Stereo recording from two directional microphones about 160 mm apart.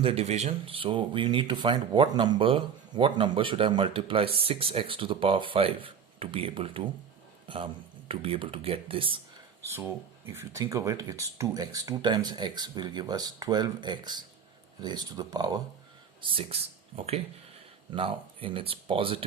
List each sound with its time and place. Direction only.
0.0 s speech: 40° right (ahead or behind)
10.3 s speech: 20° right (ahead or behind)
16.3 s speech: 40° right (ahead or behind)